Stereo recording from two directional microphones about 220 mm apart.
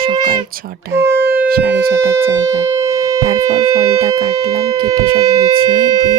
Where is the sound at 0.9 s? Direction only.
10° right (ahead or behind).